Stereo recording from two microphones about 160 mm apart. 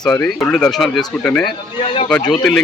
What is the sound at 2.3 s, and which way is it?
Speech, 5° left (ahead or behind).